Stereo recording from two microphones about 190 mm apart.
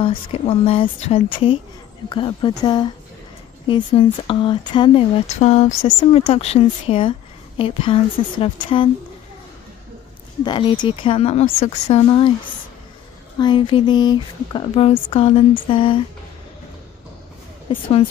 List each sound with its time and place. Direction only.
0.0 s speech: 30° left (ahead or behind)
10.4 s speech: 25° left (ahead or behind)
13.4 s speech: 25° left (ahead or behind)
17.7 s speech: 25° left (ahead or behind)